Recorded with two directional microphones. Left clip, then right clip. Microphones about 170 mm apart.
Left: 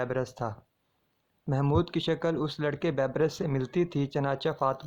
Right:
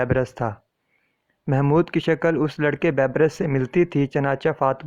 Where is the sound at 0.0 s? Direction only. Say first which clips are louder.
Right 9 dB; 45° right (ahead or behind).